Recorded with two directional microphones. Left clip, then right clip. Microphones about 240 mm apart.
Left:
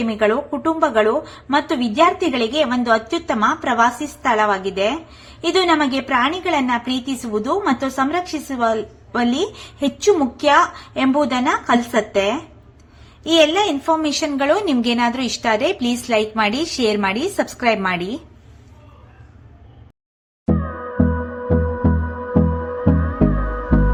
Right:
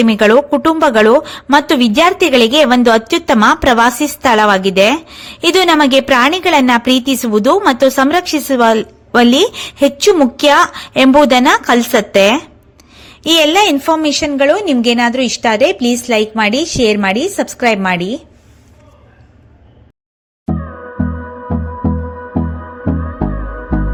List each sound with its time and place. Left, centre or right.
0.0 s a woman's voice: right; by 18.2 s centre